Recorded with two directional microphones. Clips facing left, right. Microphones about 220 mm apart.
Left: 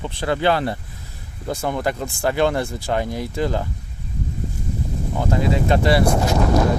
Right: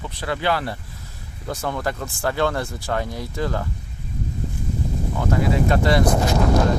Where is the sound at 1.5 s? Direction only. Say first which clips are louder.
Left 3 dB; 15° left (ahead or behind).